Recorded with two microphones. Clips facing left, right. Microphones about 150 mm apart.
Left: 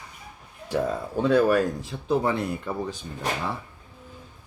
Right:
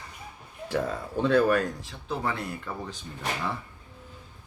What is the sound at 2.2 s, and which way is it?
Speech, 20° left (ahead or behind).